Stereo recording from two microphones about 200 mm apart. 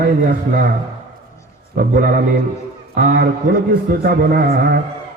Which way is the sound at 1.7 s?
45° right (ahead or behind).